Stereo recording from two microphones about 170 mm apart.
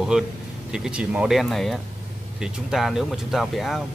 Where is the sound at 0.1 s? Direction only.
5° right (ahead or behind).